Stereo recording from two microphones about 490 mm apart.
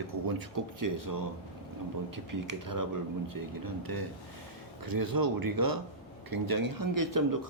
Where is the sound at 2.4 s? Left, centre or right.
Right.